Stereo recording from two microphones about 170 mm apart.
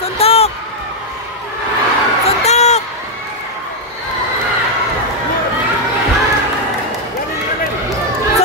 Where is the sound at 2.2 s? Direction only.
40° left (ahead or behind).